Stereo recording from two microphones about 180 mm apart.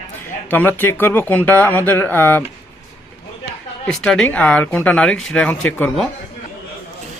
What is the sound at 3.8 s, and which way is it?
Speech, 5° left (ahead or behind).